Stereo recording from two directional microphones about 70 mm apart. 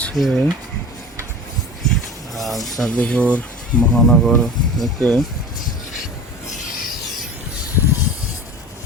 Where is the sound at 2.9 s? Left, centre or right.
Centre.